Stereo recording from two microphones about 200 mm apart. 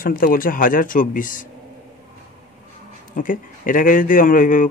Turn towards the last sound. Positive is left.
turn(degrees=40)  # may be behind; listen again after turning